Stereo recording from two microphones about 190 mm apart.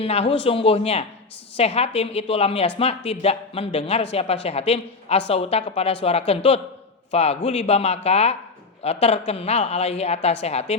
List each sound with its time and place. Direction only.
0.0 s speech: 30° left (ahead or behind)